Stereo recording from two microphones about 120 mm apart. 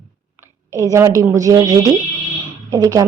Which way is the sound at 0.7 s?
25° right (ahead or behind).